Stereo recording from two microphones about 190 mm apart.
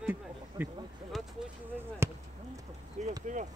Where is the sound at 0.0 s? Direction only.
10° right (ahead or behind).